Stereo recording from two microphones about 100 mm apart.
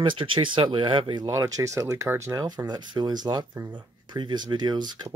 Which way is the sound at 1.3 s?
35° right (ahead or behind).